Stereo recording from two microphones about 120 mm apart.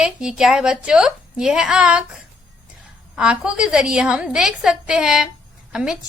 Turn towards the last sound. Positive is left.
turn(degrees=-5)  # may be behind; listen again after turning